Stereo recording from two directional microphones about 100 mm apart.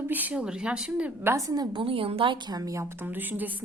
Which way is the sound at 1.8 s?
65° right (ahead or behind).